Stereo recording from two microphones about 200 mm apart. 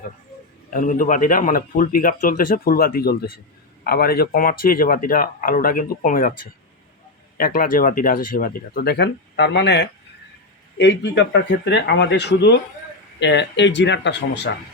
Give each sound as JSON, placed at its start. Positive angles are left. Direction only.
{"t": 0.7, "sound": "speech", "side_deg": 40}
{"t": 7.3, "sound": "speech", "side_deg": 45}